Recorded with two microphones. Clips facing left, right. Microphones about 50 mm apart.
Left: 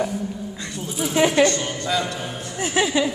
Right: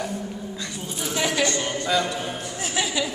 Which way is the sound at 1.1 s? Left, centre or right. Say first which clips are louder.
Left 7 dB; left.